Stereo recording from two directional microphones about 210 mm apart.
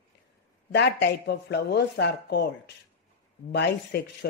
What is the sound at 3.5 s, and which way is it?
Speech, 55° left (ahead or behind).